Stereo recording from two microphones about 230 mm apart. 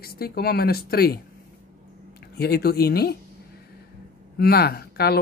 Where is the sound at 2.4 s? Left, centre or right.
Left.